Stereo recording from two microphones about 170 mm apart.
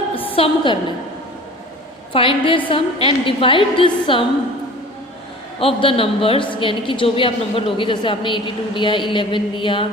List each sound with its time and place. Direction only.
0.3 s a woman's voice: 35° left (ahead or behind)
2.1 s a woman's voice: 30° left (ahead or behind)
5.5 s a woman's voice: 35° left (ahead or behind)